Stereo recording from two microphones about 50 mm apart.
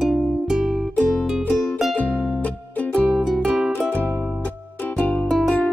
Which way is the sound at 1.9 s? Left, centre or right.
Left.